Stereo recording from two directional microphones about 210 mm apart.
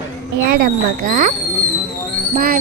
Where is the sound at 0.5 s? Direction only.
45° right (ahead or behind).